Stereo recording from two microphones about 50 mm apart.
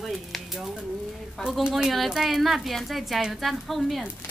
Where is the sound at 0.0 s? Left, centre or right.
Centre.